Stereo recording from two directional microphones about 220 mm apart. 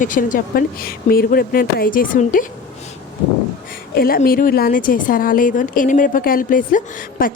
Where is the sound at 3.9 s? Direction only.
40° left (ahead or behind).